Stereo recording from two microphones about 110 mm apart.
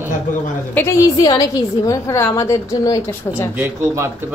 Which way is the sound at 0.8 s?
15° left (ahead or behind).